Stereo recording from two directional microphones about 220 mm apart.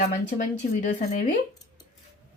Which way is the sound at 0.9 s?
35° left (ahead or behind).